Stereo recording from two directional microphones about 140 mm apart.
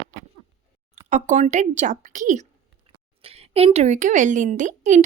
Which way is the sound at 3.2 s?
45° right (ahead or behind).